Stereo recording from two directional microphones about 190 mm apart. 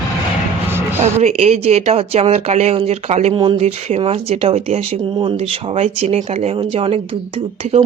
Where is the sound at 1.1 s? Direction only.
35° right (ahead or behind).